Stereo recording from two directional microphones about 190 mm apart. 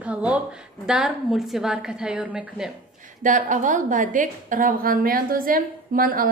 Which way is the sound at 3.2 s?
40° right (ahead or behind).